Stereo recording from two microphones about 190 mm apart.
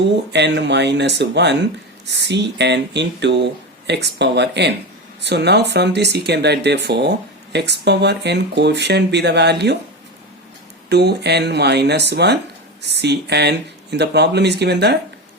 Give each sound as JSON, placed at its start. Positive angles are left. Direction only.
{"t": 0.3, "sound": "speech", "side_deg": -65}
{"t": 10.8, "sound": "speech", "side_deg": -60}